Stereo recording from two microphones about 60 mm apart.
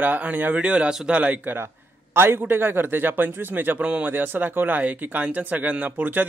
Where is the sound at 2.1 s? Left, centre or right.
Right.